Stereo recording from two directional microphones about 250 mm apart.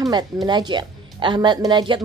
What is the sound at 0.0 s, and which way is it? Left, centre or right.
Speech, centre.